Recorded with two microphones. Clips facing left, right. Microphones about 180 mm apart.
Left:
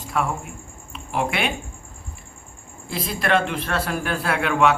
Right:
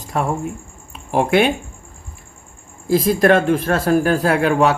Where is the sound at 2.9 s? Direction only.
45° right (ahead or behind).